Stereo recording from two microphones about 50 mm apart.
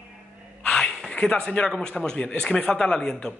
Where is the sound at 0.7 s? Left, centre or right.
Centre.